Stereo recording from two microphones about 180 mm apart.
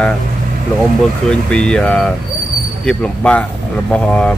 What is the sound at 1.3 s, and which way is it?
Speech, 5° left (ahead or behind).